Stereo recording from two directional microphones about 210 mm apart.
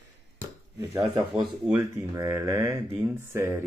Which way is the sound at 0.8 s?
15° right (ahead or behind).